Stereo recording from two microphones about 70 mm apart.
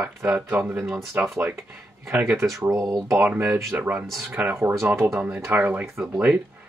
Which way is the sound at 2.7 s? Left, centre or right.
Right.